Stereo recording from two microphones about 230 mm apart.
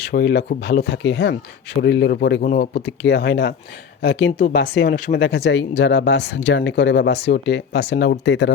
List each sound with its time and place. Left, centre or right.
0.0 s speech: left